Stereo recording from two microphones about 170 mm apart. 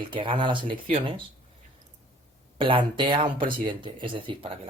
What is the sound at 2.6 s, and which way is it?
Speech, 30° right (ahead or behind).